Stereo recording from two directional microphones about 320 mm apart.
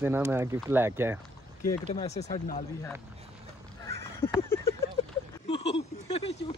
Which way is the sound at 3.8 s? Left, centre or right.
Centre.